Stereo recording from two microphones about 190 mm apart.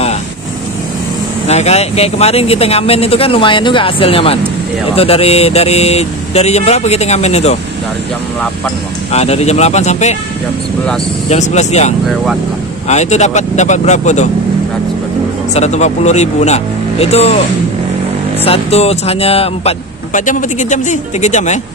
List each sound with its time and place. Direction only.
1.5 s speech: 35° left (ahead or behind)
9.1 s speech: 35° left (ahead or behind)
11.2 s speech: 35° left (ahead or behind)
15.5 s speech: 35° left (ahead or behind)
18.4 s speech: 30° left (ahead or behind)